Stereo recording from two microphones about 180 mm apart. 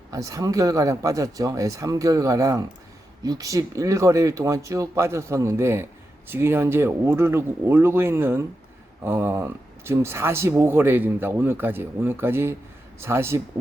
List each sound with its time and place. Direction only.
0.1 s speech: 20° right (ahead or behind)